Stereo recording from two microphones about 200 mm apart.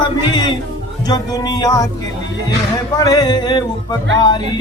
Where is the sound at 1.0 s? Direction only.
20° left (ahead or behind).